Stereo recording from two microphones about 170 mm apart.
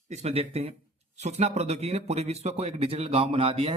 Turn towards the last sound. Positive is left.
turn(degrees=-35)  # may be behind; listen again after turning